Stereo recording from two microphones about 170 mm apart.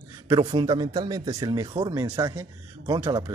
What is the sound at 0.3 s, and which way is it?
Speech, 25° right (ahead or behind).